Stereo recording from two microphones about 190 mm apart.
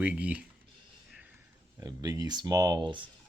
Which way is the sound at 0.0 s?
5° right (ahead or behind).